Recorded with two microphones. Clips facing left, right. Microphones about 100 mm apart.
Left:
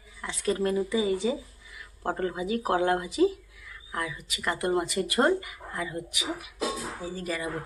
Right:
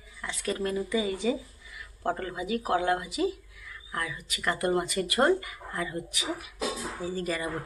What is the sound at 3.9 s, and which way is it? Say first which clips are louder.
Speech: left 1 dB; 20° left (ahead or behind).